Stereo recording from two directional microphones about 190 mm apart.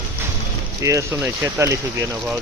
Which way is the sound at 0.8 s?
15° right (ahead or behind).